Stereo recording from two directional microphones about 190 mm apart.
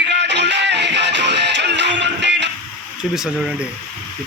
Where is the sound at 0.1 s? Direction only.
65° right (ahead or behind).